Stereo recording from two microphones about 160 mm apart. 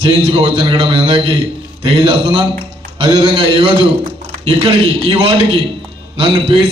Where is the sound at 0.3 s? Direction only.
40° right (ahead or behind).